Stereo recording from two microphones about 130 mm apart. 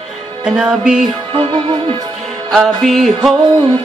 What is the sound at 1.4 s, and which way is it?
Music, 45° right (ahead or behind).